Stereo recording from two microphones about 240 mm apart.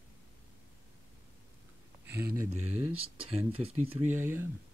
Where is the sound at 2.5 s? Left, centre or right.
Right.